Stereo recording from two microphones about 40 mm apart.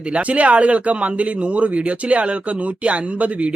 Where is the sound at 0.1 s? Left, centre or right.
Right.